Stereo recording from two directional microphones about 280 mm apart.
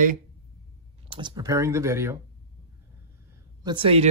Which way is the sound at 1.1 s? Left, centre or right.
Centre.